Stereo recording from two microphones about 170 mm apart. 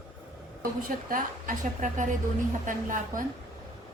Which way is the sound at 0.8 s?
55° right (ahead or behind).